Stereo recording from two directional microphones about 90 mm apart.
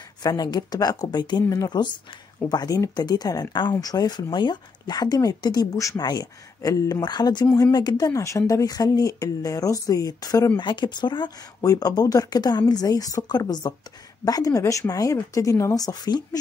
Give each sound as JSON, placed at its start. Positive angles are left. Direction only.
{"t": 0.2, "sound": "speech", "side_deg": 45}
{"t": 2.5, "sound": "speech", "side_deg": 45}
{"t": 10.6, "sound": "speech", "side_deg": 60}